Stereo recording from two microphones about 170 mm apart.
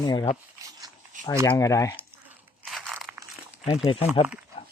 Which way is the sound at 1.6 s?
20° left (ahead or behind).